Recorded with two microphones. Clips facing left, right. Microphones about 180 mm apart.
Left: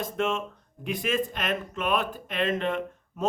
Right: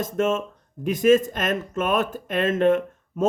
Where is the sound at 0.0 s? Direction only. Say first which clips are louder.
Right 5 dB; 45° right (ahead or behind).